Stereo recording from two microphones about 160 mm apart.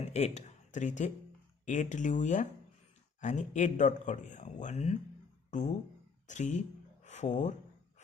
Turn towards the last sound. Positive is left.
turn(degrees=50)  # may be behind; listen again after turning